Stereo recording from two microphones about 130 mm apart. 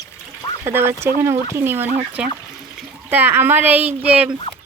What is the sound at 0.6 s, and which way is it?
Speech, 20° right (ahead or behind).